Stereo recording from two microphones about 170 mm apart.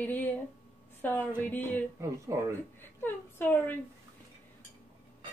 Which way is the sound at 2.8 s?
10° left (ahead or behind).